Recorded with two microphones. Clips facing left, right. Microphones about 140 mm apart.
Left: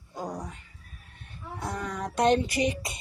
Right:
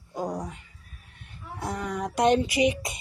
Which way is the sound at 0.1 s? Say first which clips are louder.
Right 4 dB; 15° right (ahead or behind).